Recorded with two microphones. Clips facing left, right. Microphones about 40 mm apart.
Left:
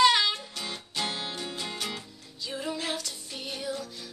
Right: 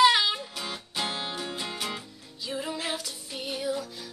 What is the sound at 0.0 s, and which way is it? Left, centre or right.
Music, centre.